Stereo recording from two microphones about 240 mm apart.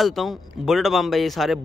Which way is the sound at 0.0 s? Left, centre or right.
Centre.